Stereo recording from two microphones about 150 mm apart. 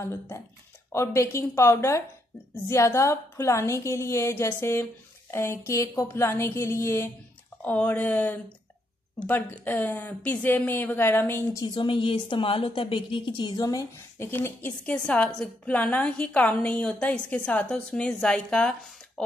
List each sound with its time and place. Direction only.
0.0 s a woman's voice: 15° left (ahead or behind)
11.6 s a woman's voice: 30° left (ahead or behind); by 19.2 s 5° left (ahead or behind)